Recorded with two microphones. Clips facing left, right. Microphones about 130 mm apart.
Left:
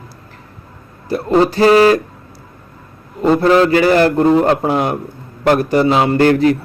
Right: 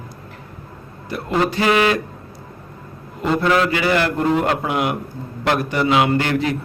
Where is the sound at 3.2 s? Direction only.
35° left (ahead or behind).